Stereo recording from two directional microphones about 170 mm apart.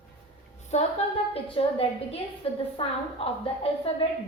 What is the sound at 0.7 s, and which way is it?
A woman's voice, 40° left (ahead or behind).